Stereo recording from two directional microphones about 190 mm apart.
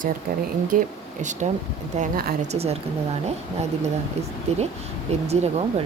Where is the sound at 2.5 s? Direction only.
35° right (ahead or behind).